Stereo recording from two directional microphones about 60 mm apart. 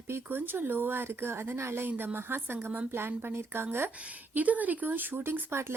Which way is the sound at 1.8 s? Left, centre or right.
Right.